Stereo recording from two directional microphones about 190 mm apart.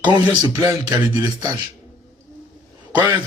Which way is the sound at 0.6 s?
15° right (ahead or behind).